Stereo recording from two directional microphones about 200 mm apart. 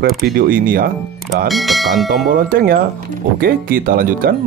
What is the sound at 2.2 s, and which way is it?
Speech, 45° right (ahead or behind).